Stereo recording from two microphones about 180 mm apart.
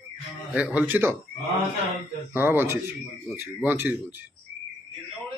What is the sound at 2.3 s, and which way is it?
A man's voice, 10° right (ahead or behind).